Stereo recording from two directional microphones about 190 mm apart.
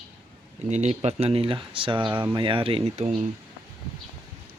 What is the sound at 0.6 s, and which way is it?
Speech, 35° right (ahead or behind).